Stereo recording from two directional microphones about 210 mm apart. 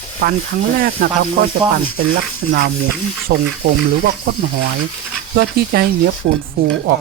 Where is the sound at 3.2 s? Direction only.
45° right (ahead or behind).